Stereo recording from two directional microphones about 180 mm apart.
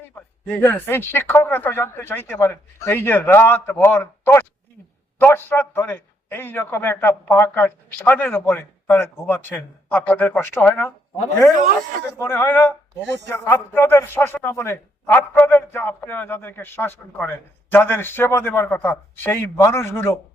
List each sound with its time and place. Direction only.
0.2 s a man's voice: 10° left (ahead or behind)
11.5 s speech: 45° right (ahead or behind)
12.2 s a man's voice: 15° left (ahead or behind)